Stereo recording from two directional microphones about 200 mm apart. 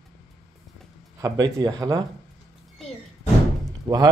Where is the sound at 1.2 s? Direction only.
20° right (ahead or behind).